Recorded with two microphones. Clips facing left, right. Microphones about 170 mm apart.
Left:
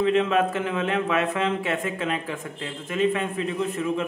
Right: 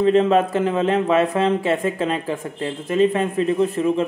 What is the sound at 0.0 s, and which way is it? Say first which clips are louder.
A man's voice: right 5 dB; 35° right (ahead or behind).